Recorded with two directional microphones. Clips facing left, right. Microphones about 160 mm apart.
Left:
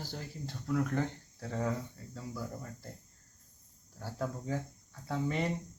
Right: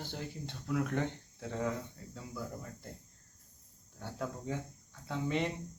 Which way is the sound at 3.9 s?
Centre (ahead or behind).